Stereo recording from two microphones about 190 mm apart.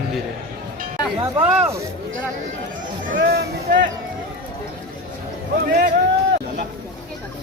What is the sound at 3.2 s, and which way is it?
Speech, 55° right (ahead or behind).